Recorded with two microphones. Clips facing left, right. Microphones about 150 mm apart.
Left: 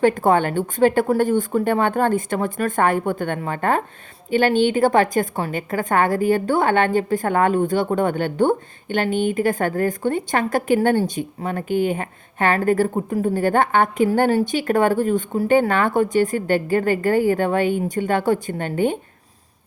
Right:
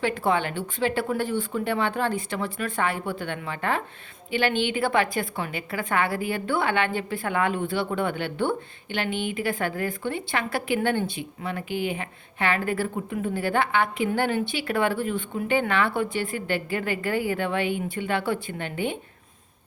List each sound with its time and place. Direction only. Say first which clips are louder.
0.0 s a woman's voice: left 8 dB; 45° left (ahead or behind)